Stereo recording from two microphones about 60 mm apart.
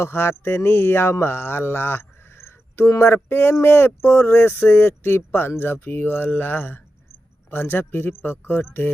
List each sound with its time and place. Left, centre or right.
0.0 s speech: left